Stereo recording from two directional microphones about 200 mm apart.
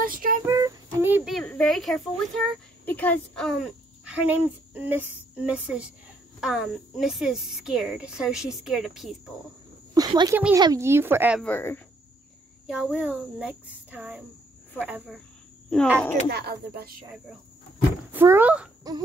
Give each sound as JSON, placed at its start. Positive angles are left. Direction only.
{"t": 0.0, "sound": "a sound", "side_deg": -45}
{"t": 0.5, "sound": "a child's voice", "side_deg": -15}
{"t": 4.0, "sound": "a woman's voice", "side_deg": -5}
{"t": 9.9, "sound": "speech", "side_deg": -20}
{"t": 11.4, "sound": "speech", "side_deg": 10}
{"t": 12.6, "sound": "a woman's voice", "side_deg": 0}
{"t": 16.3, "sound": "speech", "side_deg": -55}
{"t": 18.1, "sound": "speech", "side_deg": -10}